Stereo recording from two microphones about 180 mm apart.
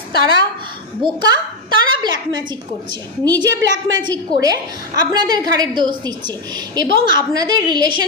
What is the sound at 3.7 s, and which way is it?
A woman's voice, 25° right (ahead or behind).